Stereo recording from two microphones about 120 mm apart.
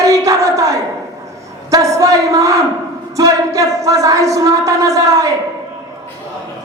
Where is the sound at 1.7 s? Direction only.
25° right (ahead or behind).